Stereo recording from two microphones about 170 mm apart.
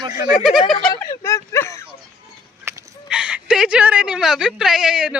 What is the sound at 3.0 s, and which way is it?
A woman's voice, 5° right (ahead or behind).